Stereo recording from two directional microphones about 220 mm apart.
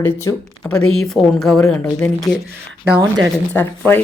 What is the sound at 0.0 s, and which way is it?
Speech, 10° left (ahead or behind).